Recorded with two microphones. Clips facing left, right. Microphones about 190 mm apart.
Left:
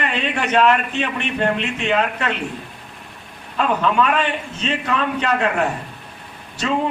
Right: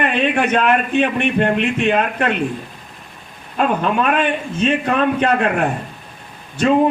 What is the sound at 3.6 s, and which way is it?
A man's voice, 50° right (ahead or behind).